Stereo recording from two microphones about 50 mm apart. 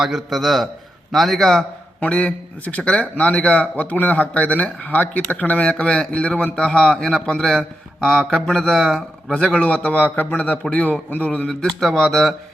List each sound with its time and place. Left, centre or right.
0.0 s speech: centre
2.0 s a man's voice: left
5.7 s a man's voice: centre
9.3 s speech: left
11.6 s speech: centre